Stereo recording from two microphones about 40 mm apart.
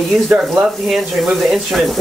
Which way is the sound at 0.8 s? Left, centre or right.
Centre.